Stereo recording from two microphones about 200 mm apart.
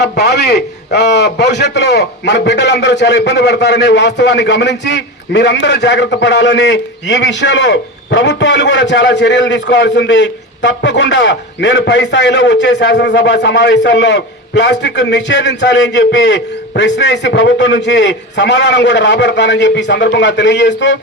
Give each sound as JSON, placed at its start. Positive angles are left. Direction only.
{"t": 0.0, "sound": "a man's voice", "side_deg": 60}